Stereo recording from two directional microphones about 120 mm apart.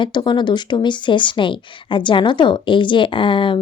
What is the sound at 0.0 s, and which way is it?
A woman's voice, 40° left (ahead or behind).